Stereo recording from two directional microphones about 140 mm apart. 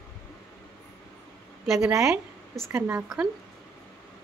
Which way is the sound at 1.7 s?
20° right (ahead or behind).